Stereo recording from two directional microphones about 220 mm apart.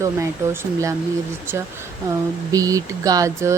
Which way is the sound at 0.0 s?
15° right (ahead or behind).